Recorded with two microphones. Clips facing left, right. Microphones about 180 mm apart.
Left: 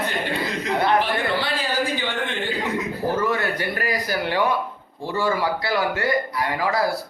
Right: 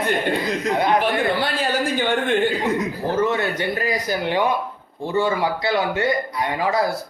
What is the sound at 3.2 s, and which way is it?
Speech, 20° right (ahead or behind).